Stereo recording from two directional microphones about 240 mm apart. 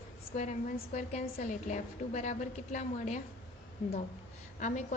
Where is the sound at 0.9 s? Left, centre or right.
Left.